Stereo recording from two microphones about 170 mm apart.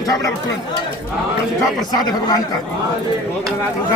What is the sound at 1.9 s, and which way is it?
Speech, 25° left (ahead or behind).